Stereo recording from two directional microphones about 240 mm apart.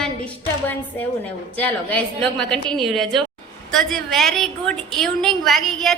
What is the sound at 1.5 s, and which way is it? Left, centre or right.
A woman's voice, centre.